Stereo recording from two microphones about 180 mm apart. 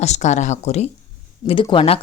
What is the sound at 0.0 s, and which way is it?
A woman's voice, 40° left (ahead or behind).